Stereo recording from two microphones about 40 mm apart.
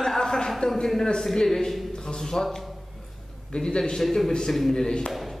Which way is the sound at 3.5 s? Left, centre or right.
Centre.